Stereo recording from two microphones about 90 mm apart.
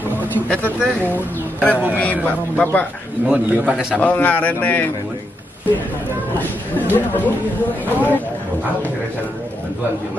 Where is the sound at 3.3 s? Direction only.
15° right (ahead or behind).